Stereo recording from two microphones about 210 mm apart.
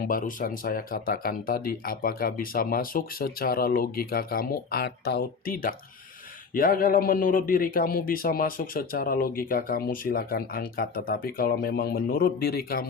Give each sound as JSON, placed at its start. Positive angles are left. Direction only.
{"t": 0.0, "sound": "a man's voice", "side_deg": 40}